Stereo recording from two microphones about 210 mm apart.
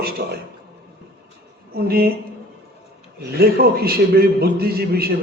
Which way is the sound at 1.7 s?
45° right (ahead or behind).